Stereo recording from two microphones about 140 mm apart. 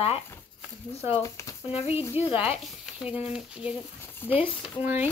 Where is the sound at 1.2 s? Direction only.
20° left (ahead or behind).